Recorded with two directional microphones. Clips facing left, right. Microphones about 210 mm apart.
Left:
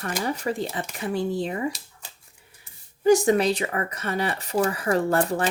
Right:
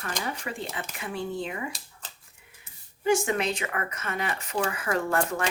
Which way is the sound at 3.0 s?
40° left (ahead or behind).